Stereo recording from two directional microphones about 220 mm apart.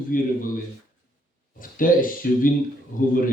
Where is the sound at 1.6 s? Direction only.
40° left (ahead or behind).